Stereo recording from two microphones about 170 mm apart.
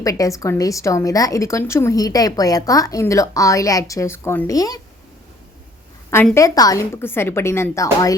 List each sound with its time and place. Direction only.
0.0 s a woman's voice: 20° left (ahead or behind)
6.3 s a woman's voice: 20° left (ahead or behind)